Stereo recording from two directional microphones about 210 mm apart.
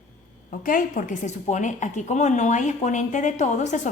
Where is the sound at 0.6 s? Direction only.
40° left (ahead or behind).